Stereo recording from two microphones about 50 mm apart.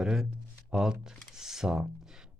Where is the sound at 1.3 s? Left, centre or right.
Centre.